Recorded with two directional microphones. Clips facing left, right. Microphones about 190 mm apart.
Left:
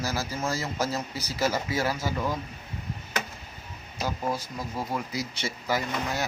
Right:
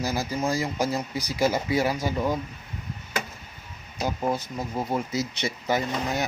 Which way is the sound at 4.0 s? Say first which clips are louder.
Right 3 dB; 20° right (ahead or behind).